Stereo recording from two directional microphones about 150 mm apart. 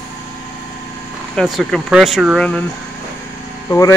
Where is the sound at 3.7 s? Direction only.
20° left (ahead or behind).